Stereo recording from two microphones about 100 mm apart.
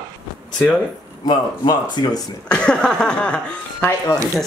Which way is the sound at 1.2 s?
40° left (ahead or behind).